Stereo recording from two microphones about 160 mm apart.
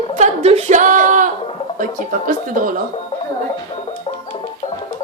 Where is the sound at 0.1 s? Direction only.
45° right (ahead or behind).